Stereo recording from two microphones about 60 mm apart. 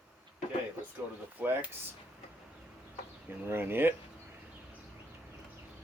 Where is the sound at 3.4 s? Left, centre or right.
Right.